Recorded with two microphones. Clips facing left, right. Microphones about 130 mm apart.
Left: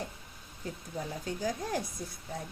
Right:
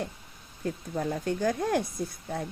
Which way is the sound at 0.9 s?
65° right (ahead or behind).